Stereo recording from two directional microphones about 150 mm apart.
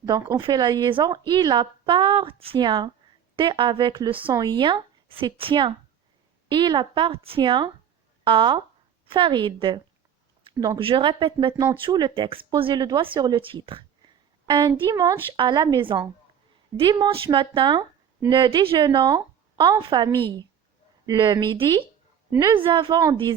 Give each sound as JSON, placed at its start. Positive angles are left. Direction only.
{"t": 0.3, "sound": "a woman's voice", "side_deg": -30}